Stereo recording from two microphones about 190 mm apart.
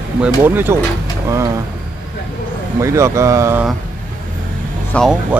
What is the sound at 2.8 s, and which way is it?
Speech, 15° right (ahead or behind).